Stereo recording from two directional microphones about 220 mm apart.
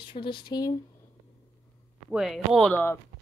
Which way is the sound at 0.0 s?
20° left (ahead or behind).